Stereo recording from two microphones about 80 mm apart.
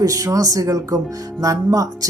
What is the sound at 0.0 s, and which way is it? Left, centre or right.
Speech, right.